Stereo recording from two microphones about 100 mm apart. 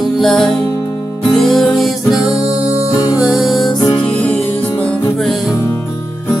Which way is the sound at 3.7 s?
45° left (ahead or behind).